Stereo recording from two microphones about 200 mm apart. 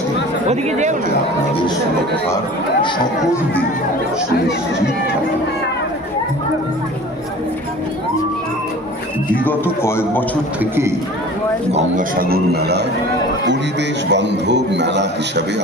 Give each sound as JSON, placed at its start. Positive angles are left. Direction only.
{"t": 0.4, "sound": "speech", "side_deg": -35}
{"t": 9.8, "sound": "a man's voice", "side_deg": 10}
{"t": 10.6, "sound": "a man's voice", "side_deg": -10}
{"t": 11.7, "sound": "a man's voice", "side_deg": -40}
{"t": 14.1, "sound": "a man's voice", "side_deg": -60}